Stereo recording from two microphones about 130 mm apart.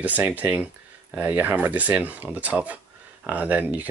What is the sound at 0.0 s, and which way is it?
Speech, 15° right (ahead or behind).